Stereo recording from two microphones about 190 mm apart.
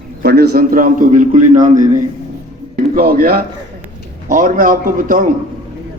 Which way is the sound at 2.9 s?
50° right (ahead or behind).